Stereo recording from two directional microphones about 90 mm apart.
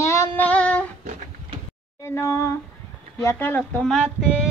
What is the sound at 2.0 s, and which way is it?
A woman's voice, 30° left (ahead or behind).